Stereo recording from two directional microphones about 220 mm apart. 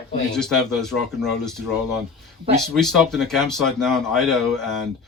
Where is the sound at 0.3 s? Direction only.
5° left (ahead or behind).